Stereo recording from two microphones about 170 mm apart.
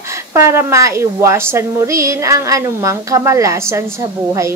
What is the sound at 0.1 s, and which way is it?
Speech, 15° right (ahead or behind).